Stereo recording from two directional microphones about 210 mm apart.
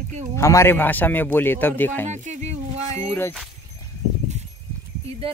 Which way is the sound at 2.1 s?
35° right (ahead or behind).